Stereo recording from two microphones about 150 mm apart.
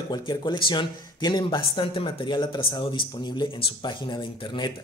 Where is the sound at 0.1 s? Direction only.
30° left (ahead or behind).